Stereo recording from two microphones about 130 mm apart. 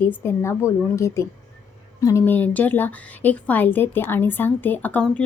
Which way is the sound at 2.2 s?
15° left (ahead or behind).